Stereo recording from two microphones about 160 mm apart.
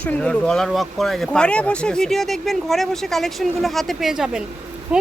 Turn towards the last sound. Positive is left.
turn(degrees=-5)  # may be behind; listen again after turning